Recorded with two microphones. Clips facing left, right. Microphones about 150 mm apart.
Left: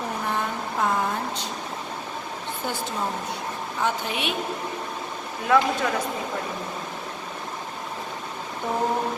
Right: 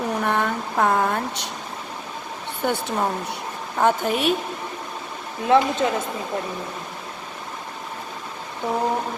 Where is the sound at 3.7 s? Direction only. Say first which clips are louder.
Right 7 dB; 50° right (ahead or behind).